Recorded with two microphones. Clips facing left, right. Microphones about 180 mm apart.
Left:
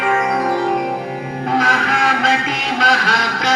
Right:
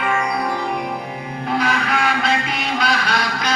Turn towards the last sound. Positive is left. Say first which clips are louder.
# left 3 dB
turn(degrees=90)